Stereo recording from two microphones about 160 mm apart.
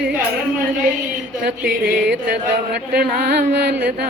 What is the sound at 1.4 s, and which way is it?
Music, 90° right.